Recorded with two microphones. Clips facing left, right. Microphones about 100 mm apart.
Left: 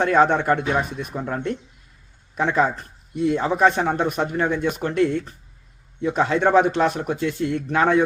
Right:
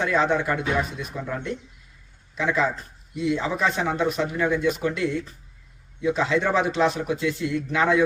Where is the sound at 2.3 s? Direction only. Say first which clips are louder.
Left 3 dB; 45° left (ahead or behind).